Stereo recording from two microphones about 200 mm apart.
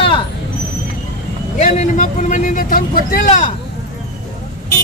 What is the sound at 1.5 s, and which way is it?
A man's voice, 40° left (ahead or behind).